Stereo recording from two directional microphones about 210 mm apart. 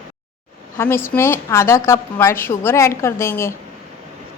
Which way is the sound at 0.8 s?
10° left (ahead or behind).